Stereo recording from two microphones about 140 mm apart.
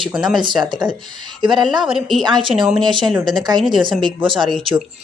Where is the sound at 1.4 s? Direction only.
Centre (ahead or behind).